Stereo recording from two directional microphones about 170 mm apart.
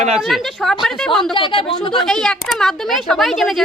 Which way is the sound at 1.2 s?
30° left (ahead or behind).